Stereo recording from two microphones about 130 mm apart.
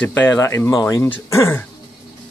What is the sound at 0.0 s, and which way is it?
Speech, 15° left (ahead or behind).